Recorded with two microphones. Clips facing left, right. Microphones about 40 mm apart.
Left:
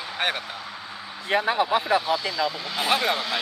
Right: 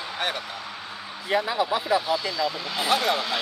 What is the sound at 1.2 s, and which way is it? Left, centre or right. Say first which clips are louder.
Speech: left 2 dB; left.